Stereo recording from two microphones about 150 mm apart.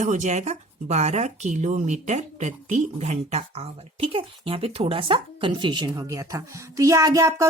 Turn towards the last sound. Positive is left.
turn(degrees=-20)  # may be behind; listen again after turning